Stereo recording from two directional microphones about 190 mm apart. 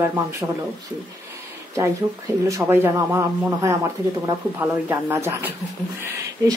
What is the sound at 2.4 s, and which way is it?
Speech, 15° right (ahead or behind).